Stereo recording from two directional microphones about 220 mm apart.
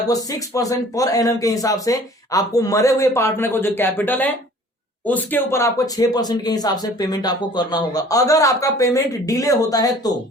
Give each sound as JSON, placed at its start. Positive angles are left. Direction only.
{"t": 0.1, "sound": "speech", "side_deg": 15}